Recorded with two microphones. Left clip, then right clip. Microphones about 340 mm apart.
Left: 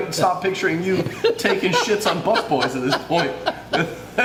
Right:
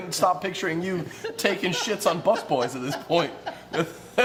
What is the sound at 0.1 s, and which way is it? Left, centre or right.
Speech, right.